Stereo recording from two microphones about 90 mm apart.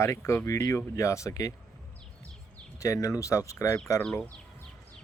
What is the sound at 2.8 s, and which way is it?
Speech, 40° left (ahead or behind).